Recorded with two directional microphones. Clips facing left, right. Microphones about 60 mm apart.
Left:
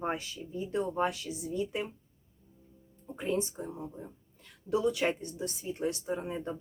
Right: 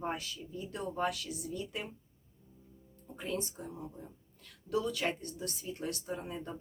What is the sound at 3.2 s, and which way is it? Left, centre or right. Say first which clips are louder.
Speech: left 6 dB; left.